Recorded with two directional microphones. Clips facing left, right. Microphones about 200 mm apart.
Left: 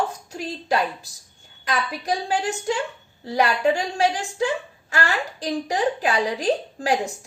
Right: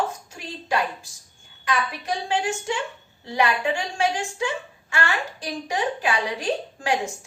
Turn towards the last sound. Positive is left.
turn(degrees=35)  # may be behind; listen again after turning